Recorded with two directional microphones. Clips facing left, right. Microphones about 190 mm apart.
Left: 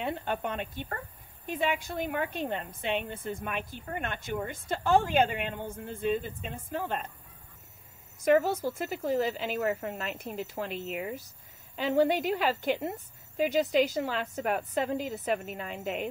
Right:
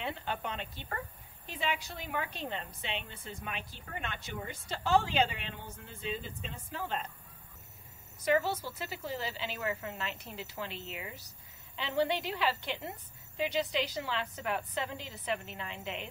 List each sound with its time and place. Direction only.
0.0 s a woman's voice: 50° left (ahead or behind)
8.2 s a woman's voice: 45° left (ahead or behind)